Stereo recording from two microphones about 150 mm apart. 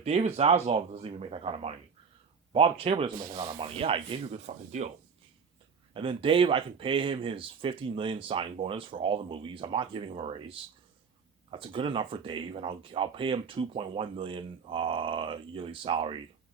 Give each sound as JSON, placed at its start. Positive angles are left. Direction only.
{"t": 0.0, "sound": "speech", "side_deg": -45}
{"t": 5.9, "sound": "speech", "side_deg": -35}